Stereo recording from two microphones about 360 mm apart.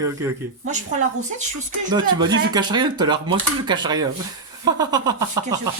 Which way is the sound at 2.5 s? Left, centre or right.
Centre.